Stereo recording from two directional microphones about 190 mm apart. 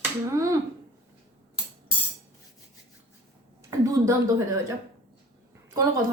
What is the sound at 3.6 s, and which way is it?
A woman's voice, 15° right (ahead or behind).